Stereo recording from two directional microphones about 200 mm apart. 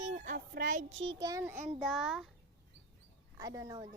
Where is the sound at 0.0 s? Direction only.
40° right (ahead or behind).